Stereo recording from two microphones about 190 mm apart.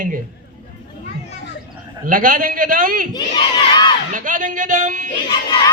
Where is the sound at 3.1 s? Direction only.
25° left (ahead or behind).